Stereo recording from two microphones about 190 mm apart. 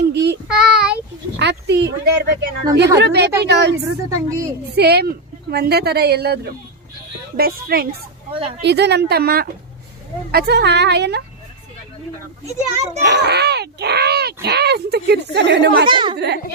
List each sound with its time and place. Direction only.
0.1 s child singing: 60° right (ahead or behind)
0.4 s child singing: 5° right (ahead or behind)
1.4 s speech: 65° right (ahead or behind)
4.1 s a woman's voice: 15° right (ahead or behind)
4.7 s a woman's voice: 60° right (ahead or behind)
7.9 s a woman's voice: 30° right (ahead or behind)
8.6 s speech: 65° right (ahead or behind)
12.5 s a child's voice: 35° right (ahead or behind)
13.0 s a child's voice: 60° right (ahead or behind)
15.9 s a child's voice: 25° right (ahead or behind)
16.1 s speech: 60° right (ahead or behind)